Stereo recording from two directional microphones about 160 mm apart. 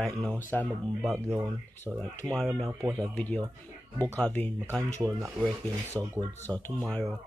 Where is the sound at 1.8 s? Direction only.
10° left (ahead or behind).